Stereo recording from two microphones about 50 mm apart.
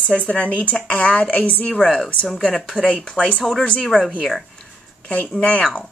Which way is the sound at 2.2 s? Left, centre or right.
Centre.